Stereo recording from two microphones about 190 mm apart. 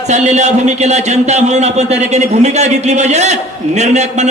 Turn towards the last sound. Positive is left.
turn(degrees=-35)  # may be behind; listen again after turning